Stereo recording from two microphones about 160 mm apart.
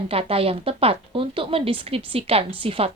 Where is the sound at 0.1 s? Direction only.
40° right (ahead or behind).